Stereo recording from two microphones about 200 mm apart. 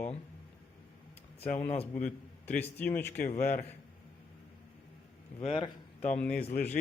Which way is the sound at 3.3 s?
35° left (ahead or behind).